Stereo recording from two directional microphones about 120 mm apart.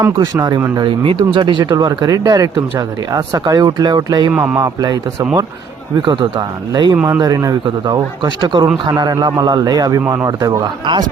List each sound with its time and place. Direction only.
0.3 s speech: 35° right (ahead or behind)
0.8 s speech: 45° right (ahead or behind)
4.3 s speech: 10° right (ahead or behind)
4.5 s speech: 30° right (ahead or behind)
6.9 s speech: 15° right (ahead or behind)
7.2 s speech: 35° right (ahead or behind)